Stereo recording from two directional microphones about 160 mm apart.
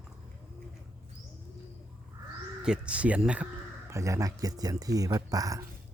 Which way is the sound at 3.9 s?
20° right (ahead or behind).